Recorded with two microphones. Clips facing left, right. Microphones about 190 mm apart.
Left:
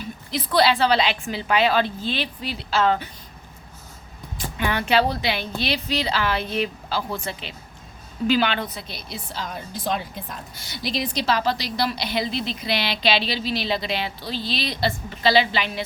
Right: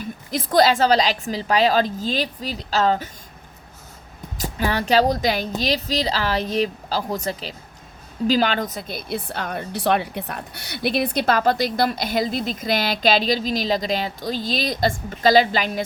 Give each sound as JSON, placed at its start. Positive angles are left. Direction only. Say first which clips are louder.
{"t": 0.0, "sound": "a woman's voice", "louder": "right 2 dB", "side_deg": -45}
{"t": 4.4, "sound": "a woman's voice", "louder": "right 2 dB", "side_deg": -35}